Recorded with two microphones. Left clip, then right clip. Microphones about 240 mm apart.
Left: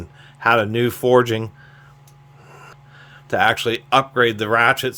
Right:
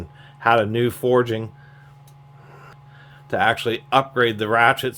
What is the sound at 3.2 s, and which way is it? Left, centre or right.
Speech, centre.